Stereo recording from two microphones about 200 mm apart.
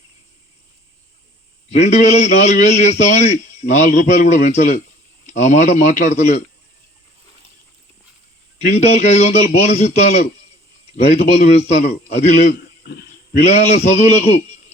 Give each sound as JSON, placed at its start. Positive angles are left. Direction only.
{"t": 1.7, "sound": "a man's voice", "side_deg": 35}
{"t": 8.6, "sound": "a man's voice", "side_deg": 35}
{"t": 12.8, "sound": "a sound", "side_deg": 50}
{"t": 13.3, "sound": "a man's voice", "side_deg": 35}